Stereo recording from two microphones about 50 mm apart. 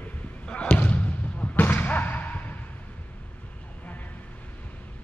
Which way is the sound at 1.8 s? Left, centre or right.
Left.